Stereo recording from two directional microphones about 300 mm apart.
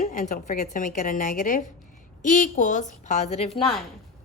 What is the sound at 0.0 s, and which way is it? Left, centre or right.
A woman's voice, left.